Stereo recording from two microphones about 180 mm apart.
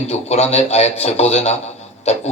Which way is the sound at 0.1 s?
35° left (ahead or behind).